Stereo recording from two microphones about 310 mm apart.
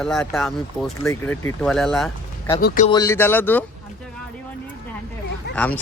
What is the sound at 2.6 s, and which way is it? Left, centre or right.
Speech, left.